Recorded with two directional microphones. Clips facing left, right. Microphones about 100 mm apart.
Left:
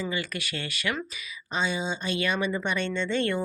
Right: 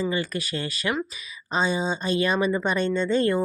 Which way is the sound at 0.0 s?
35° right (ahead or behind).